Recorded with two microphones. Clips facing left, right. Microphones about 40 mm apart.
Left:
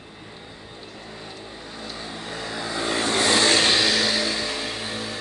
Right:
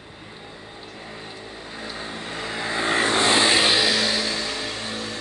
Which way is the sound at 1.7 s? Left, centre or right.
Right.